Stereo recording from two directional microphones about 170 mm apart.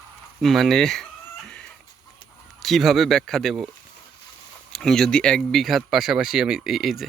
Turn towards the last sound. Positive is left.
turn(degrees=0)  # may be behind; listen again after turning